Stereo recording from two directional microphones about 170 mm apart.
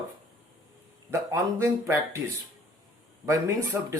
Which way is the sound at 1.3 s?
15° right (ahead or behind).